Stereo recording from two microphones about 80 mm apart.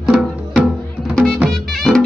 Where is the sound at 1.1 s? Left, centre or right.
Centre.